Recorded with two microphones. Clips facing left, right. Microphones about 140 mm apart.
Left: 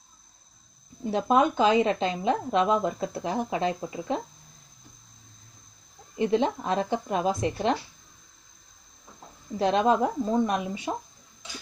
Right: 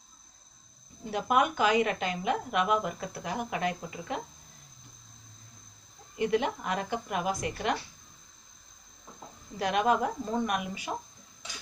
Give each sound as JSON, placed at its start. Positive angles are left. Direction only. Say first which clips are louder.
{"t": 1.1, "sound": "a woman's voice", "louder": "left 4 dB", "side_deg": 25}
{"t": 6.1, "sound": "a woman's voice", "louder": "left 4 dB", "side_deg": 25}
{"t": 9.6, "sound": "a woman's voice", "louder": "left 4 dB", "side_deg": 25}